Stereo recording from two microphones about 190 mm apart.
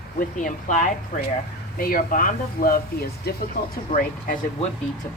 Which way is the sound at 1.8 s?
45° left (ahead or behind).